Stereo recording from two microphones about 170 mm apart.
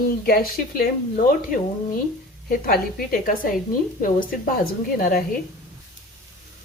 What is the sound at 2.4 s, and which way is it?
Speech, 55° left (ahead or behind).